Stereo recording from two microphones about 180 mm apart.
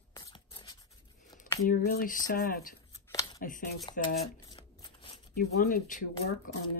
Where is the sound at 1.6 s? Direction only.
50° left (ahead or behind).